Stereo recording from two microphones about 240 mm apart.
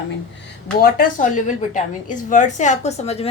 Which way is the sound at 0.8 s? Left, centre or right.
Left.